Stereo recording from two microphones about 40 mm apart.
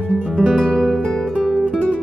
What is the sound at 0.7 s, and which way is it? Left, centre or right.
Music, centre.